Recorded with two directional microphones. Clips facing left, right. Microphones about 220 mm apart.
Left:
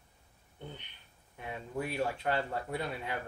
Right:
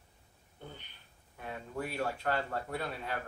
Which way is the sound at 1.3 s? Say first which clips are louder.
Left 2 dB; 15° left (ahead or behind).